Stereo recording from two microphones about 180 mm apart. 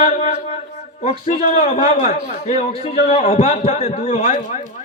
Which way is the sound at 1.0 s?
35° left (ahead or behind).